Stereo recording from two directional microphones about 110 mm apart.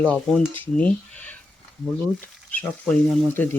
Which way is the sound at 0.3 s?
Centre (ahead or behind).